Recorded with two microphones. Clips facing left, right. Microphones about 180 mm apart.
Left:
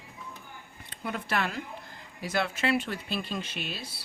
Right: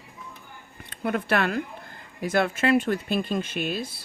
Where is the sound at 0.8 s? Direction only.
60° right (ahead or behind).